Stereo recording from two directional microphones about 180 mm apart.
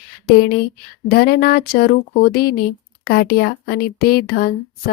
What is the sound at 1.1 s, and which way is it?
Speech, 60° left (ahead or behind).